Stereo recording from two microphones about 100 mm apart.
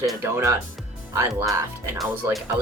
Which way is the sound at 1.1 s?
25° right (ahead or behind).